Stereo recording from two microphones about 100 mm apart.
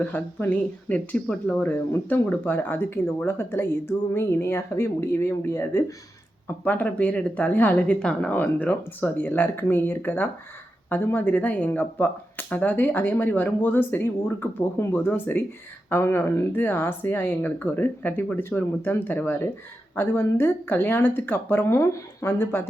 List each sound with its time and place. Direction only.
0.0 s speech: 20° left (ahead or behind)